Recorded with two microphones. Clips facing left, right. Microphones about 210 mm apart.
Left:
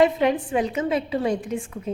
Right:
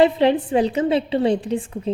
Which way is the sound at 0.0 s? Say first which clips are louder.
Right 3 dB; 30° right (ahead or behind).